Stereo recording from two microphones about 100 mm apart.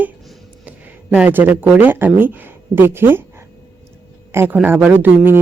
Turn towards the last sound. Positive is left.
turn(degrees=-20)  # may be behind; listen again after turning